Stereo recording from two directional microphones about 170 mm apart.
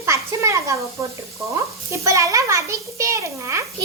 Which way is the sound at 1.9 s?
20° right (ahead or behind).